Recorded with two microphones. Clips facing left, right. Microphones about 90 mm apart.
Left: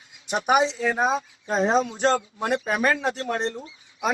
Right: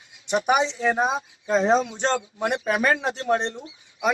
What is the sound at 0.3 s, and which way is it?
Speech, 40° left (ahead or behind).